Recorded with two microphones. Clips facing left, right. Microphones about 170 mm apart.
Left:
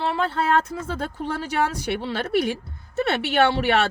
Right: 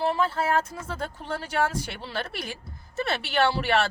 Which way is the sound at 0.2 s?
65° left (ahead or behind).